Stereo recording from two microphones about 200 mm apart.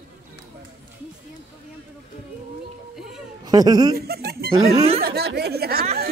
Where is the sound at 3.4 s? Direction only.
20° right (ahead or behind).